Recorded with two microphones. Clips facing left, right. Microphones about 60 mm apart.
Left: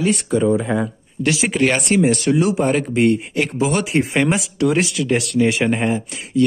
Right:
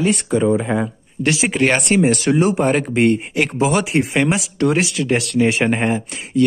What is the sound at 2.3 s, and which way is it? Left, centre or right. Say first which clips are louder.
Speech: right 1 dB; right.